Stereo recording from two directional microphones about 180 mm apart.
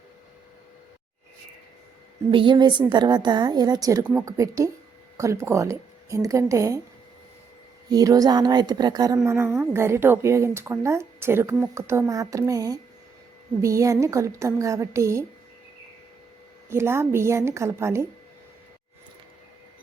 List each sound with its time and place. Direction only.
2.3 s a woman's voice: 25° right (ahead or behind)
7.9 s a woman's voice: 20° right (ahead or behind)
16.6 s a woman's voice: 15° right (ahead or behind)